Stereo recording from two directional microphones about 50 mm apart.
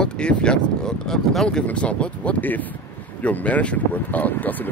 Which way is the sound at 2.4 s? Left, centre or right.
Left.